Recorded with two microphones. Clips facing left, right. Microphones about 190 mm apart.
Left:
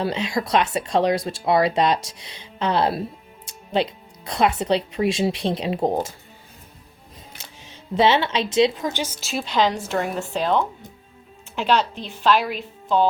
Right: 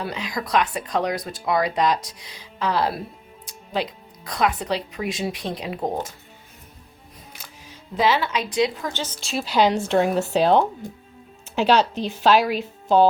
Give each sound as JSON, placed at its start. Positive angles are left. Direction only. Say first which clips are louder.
{"t": 0.0, "sound": "speech", "louder": "left 5 dB", "side_deg": 25}
{"t": 7.4, "sound": "speech", "louder": "left 3 dB", "side_deg": 25}
{"t": 9.2, "sound": "a woman's voice", "louder": "right 2 dB", "side_deg": 0}
{"t": 10.2, "sound": "a woman's voice", "louder": "right 4 dB", "side_deg": -35}